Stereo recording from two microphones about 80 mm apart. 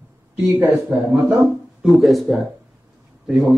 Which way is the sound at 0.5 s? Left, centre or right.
Right.